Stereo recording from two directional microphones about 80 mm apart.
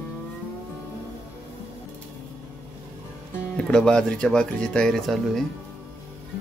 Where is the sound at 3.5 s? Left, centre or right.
Centre.